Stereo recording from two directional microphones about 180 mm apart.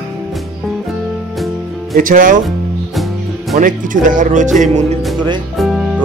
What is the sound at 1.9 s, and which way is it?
Speech, 50° right (ahead or behind).